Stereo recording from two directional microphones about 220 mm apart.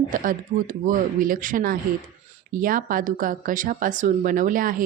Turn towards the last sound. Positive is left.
turn(degrees=-40)  # may be behind; listen again after turning